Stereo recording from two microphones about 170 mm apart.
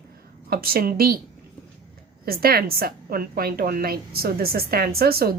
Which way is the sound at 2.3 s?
65° right (ahead or behind).